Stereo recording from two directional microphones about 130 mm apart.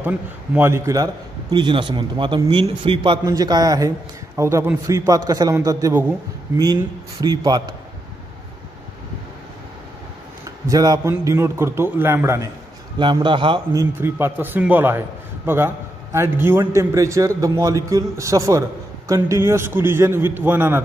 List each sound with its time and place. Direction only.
0.6 s a man's voice: 20° right (ahead or behind)
10.7 s a man's voice: 30° right (ahead or behind)
13.0 s a man's voice: 40° right (ahead or behind)
13.7 s a man's voice: 15° right (ahead or behind)